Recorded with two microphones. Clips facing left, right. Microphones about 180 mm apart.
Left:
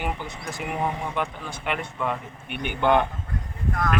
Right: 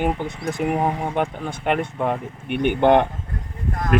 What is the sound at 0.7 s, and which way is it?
Speech, 30° right (ahead or behind).